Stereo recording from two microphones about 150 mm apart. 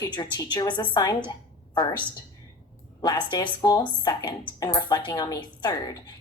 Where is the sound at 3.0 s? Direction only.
30° left (ahead or behind).